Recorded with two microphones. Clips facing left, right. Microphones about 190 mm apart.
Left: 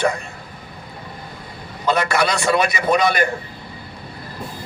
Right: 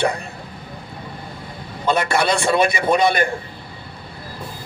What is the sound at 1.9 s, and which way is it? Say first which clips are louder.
Speech: even; 30° right (ahead or behind).